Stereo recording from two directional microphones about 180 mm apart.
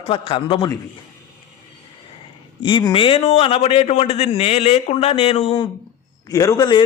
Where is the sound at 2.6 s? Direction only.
25° left (ahead or behind).